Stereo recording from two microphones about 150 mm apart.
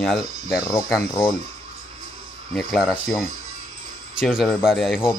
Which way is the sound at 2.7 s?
Centre (ahead or behind).